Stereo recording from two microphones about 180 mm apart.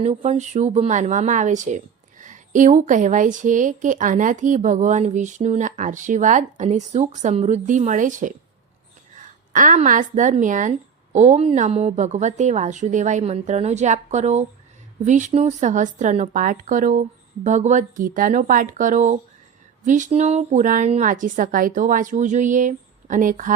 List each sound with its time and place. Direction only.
0.0 s a woman's voice: 40° right (ahead or behind)